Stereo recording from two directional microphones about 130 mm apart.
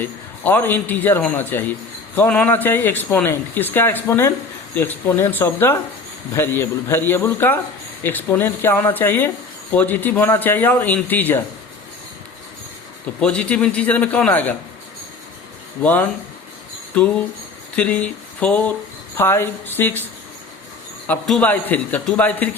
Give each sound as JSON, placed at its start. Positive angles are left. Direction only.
{"t": 0.0, "sound": "speech", "side_deg": 15}
{"t": 13.1, "sound": "speech", "side_deg": 10}
{"t": 15.8, "sound": "speech", "side_deg": 15}
{"t": 17.7, "sound": "speech", "side_deg": 10}
{"t": 21.2, "sound": "speech", "side_deg": 10}